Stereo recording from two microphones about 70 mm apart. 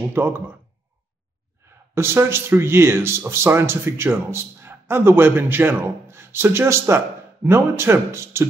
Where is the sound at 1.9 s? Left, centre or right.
Right.